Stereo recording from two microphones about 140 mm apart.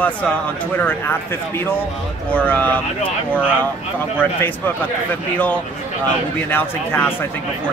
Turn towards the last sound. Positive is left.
turn(degrees=15)  # may be behind; listen again after turning